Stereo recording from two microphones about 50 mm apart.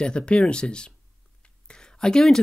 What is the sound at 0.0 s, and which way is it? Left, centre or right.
Speech, centre.